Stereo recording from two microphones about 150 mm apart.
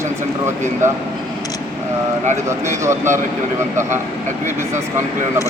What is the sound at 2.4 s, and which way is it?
Speech, 20° right (ahead or behind).